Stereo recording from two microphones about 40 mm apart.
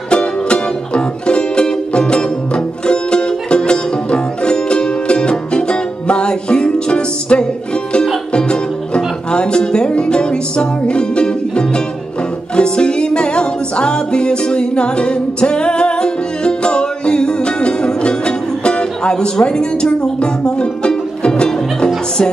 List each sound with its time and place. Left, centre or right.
0.1 s music: left